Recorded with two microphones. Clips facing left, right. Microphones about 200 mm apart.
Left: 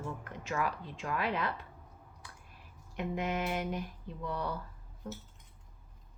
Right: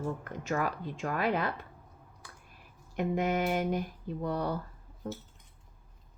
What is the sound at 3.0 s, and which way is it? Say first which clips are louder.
Speech: right 5 dB; 45° right (ahead or behind).